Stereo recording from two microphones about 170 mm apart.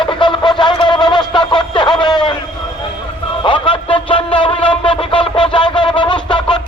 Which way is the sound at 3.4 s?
30° left (ahead or behind).